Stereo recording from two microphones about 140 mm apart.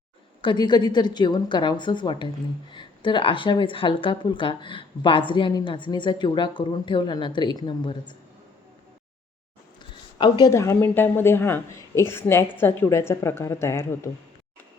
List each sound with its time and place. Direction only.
0.4 s a woman's voice: 30° left (ahead or behind)
10.2 s a woman's voice: 30° left (ahead or behind)
10.5 s speech: 20° left (ahead or behind)